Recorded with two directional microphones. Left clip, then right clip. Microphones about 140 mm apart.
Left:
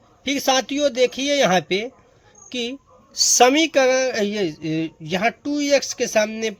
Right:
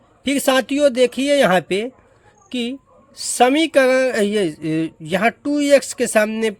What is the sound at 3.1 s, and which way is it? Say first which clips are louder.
Speech: left 1 dB; centre (ahead or behind).